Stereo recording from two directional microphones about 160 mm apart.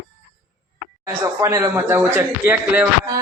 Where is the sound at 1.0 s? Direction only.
20° right (ahead or behind).